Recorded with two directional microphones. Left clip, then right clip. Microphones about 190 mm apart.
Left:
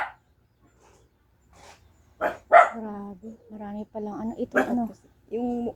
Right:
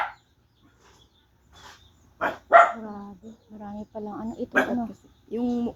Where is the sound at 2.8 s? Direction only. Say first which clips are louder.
Left 2 dB; 25° left (ahead or behind).